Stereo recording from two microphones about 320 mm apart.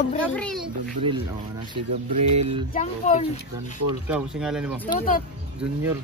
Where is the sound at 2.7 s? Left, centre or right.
Left.